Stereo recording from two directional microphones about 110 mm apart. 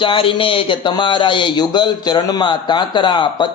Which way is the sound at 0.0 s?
50° left (ahead or behind).